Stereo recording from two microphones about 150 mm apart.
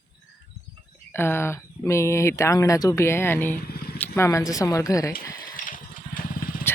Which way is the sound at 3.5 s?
90° left.